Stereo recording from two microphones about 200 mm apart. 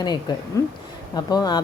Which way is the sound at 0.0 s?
20° left (ahead or behind).